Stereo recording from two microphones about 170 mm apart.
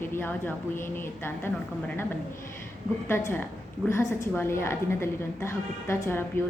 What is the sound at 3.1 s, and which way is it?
A woman's voice, 15° left (ahead or behind).